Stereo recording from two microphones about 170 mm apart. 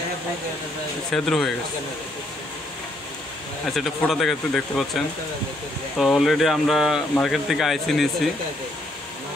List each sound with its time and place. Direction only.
1.1 s speech: centre (ahead or behind)
3.7 s speech: centre (ahead or behind)